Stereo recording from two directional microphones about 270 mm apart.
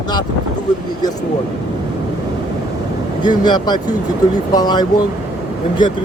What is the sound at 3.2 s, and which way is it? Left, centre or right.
Speech, centre.